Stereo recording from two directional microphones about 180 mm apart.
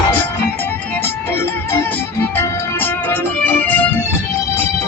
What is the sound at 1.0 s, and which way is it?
Music, 15° left (ahead or behind).